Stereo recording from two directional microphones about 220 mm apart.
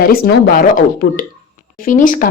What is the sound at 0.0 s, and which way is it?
Speech, 45° left (ahead or behind).